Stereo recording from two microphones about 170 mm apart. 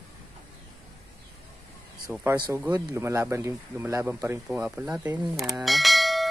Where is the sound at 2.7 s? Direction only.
20° right (ahead or behind).